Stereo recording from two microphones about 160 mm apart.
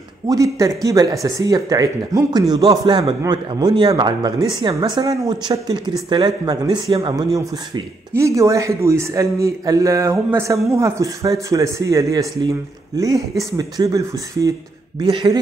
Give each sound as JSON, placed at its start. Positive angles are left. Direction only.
{"t": 0.3, "sound": "speech", "side_deg": -20}